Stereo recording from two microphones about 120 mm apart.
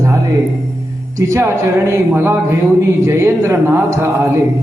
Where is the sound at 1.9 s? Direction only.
20° right (ahead or behind).